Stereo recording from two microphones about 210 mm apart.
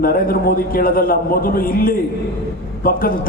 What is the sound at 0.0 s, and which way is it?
A man's voice, 45° left (ahead or behind).